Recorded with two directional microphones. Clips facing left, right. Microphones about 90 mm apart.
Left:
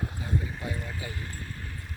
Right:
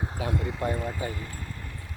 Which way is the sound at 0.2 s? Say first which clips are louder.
Right 5 dB; 75° right (ahead or behind).